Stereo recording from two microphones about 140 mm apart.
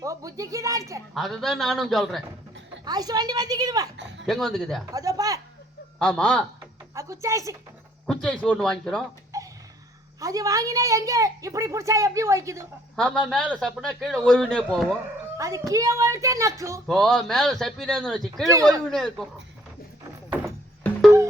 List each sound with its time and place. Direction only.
0.0 s a woman's voice: 25° right (ahead or behind)
1.1 s a man's voice: centre (ahead or behind)
2.8 s a woman's voice: 30° right (ahead or behind)
4.3 s a man's voice: 5° left (ahead or behind)
4.9 s a woman's voice: 25° right (ahead or behind)
6.0 s a man's voice: 5° left (ahead or behind)
6.6 s music: 20° right (ahead or behind)
8.0 s a man's voice: 5° left (ahead or behind)
9.3 s a sound: 20° right (ahead or behind)
10.2 s a woman's voice: 25° right (ahead or behind)
13.0 s a man's voice: 5° left (ahead or behind)
15.4 s a woman's voice: 20° right (ahead or behind)
16.8 s a man's voice: 5° left (ahead or behind)